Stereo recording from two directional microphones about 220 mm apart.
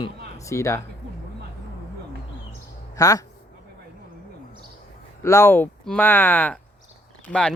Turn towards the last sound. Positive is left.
turn(degrees=5)  # may be behind; listen again after turning